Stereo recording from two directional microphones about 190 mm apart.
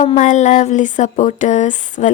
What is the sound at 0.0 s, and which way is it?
Speech, 35° left (ahead or behind).